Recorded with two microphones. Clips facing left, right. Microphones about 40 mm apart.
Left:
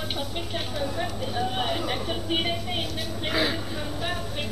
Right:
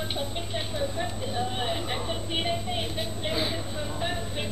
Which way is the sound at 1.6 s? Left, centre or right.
Left.